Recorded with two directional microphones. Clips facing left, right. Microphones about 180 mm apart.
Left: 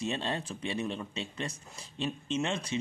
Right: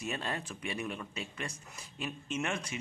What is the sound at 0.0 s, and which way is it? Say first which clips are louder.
Speech: left 4 dB; 25° left (ahead or behind).